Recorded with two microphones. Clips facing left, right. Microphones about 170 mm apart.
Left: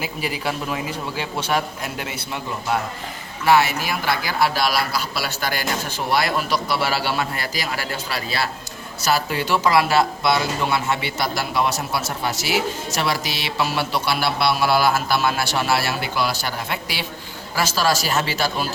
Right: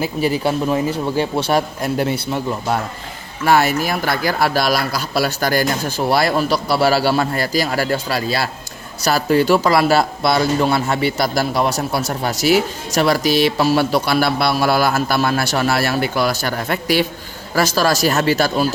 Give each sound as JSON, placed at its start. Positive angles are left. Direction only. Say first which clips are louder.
{"t": 0.2, "sound": "speech", "louder": "right 9 dB", "side_deg": -30}